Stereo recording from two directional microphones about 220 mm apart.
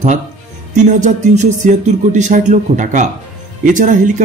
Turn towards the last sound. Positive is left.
turn(degrees=-35)  # may be behind; listen again after turning